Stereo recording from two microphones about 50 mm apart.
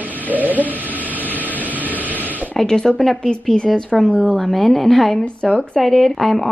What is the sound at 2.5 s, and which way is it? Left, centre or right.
Speech, centre.